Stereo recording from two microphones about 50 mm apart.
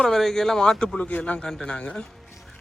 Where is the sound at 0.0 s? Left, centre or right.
Centre.